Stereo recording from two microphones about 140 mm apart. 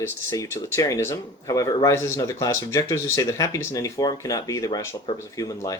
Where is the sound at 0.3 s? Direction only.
20° left (ahead or behind).